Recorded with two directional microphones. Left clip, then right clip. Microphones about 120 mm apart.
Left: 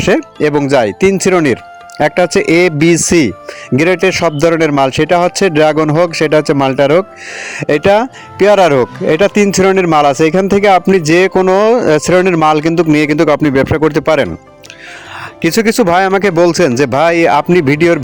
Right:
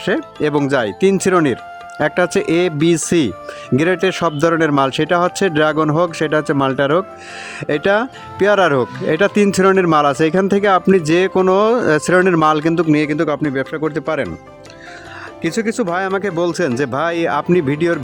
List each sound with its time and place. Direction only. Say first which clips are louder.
0.3 s speech: left 3 dB; 20° left (ahead or behind); by 14.3 s 55° left (ahead or behind)
15.4 s speech: left 8 dB; 50° left (ahead or behind)